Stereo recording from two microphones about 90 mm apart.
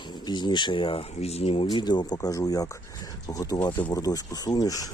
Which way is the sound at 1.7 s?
55° left (ahead or behind).